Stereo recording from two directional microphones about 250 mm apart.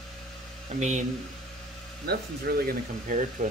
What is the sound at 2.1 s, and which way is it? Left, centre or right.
Speech, right.